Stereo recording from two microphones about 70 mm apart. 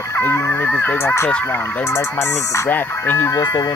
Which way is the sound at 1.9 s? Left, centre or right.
Left.